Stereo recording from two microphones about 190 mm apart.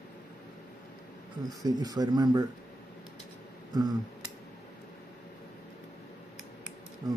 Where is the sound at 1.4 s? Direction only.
20° right (ahead or behind).